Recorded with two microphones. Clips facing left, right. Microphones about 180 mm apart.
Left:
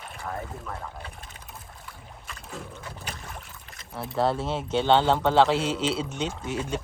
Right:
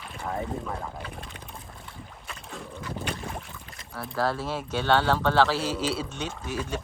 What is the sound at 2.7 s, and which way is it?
Boat, 30° right (ahead or behind).